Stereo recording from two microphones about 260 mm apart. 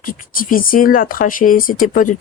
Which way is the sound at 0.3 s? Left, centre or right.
Left.